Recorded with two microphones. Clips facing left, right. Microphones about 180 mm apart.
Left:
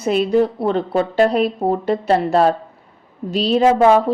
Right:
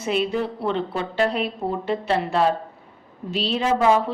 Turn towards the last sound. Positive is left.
turn(degrees=45)  # may be behind; listen again after turning